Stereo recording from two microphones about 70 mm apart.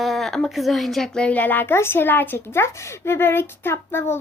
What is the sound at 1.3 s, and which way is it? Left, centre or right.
Speech, left.